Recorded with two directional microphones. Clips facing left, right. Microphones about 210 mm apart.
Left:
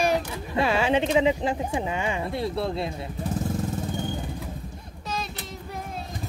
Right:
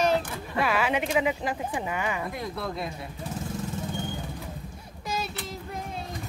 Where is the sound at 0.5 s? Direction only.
25° left (ahead or behind).